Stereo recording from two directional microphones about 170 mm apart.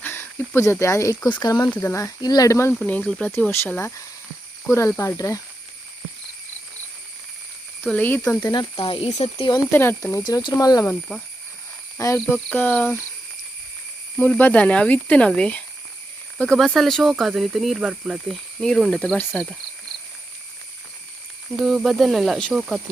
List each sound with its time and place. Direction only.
0.0 s speech: 15° left (ahead or behind)
7.9 s speech: 10° left (ahead or behind)
8.4 s speech: 25° left (ahead or behind)
9.7 s speech: 15° left (ahead or behind)
11.9 s speech: 15° left (ahead or behind)
14.2 s speech: 10° left (ahead or behind)
21.6 s speech: centre (ahead or behind)